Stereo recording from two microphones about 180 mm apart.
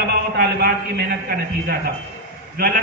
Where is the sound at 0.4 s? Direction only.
60° right (ahead or behind).